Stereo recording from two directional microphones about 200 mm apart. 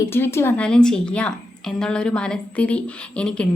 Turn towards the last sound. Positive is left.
turn(degrees=5)  # may be behind; listen again after turning